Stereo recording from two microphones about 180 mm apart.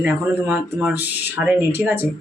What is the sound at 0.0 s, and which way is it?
Speech, 10° right (ahead or behind).